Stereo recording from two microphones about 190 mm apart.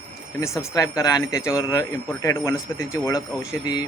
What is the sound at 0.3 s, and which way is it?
Speech, 15° left (ahead or behind).